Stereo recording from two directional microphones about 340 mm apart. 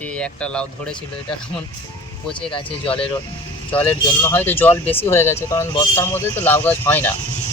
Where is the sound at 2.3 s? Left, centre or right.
Centre.